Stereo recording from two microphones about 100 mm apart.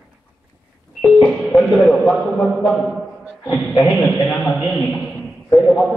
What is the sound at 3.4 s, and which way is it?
Speech, 40° left (ahead or behind).